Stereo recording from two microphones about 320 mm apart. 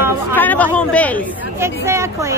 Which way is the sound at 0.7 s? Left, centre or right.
Centre.